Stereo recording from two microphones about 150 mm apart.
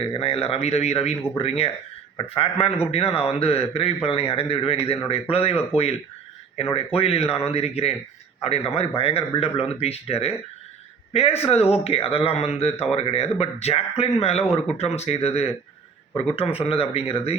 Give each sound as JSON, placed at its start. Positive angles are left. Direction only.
{"t": 0.1, "sound": "a man's voice", "side_deg": 40}